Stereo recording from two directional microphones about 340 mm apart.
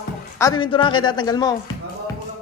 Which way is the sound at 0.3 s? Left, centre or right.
Centre.